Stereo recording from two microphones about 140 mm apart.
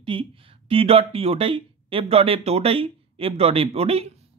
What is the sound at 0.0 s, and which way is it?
Speech, 40° right (ahead or behind).